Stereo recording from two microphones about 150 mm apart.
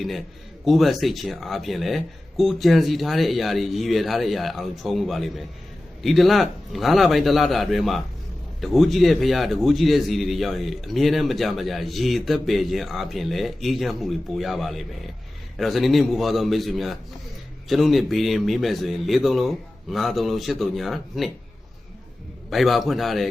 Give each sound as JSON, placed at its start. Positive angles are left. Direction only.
{"t": 0.6, "sound": "a man's voice", "side_deg": 0}
{"t": 22.4, "sound": "a man's voice", "side_deg": 0}